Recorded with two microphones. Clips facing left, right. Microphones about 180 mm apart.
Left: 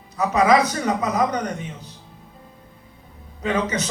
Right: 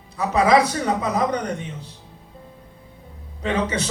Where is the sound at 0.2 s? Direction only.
30° right (ahead or behind).